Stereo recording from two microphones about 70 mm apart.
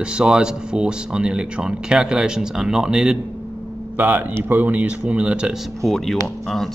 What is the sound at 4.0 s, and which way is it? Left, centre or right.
Speech, right.